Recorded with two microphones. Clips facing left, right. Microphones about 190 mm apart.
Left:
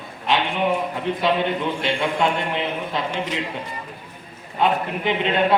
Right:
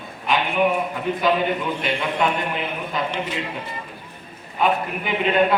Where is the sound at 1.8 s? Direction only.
25° left (ahead or behind).